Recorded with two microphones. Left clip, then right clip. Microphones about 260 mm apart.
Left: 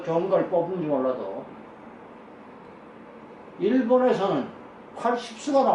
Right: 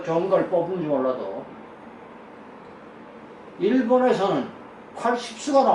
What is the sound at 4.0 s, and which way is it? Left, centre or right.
A man's voice, centre.